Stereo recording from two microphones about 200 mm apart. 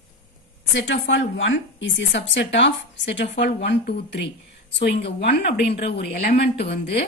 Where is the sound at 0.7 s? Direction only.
65° left (ahead or behind).